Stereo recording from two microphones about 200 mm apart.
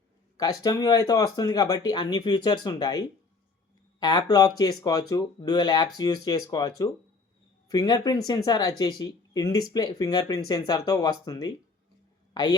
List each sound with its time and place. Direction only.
0.3 s a woman's voice: 20° left (ahead or behind)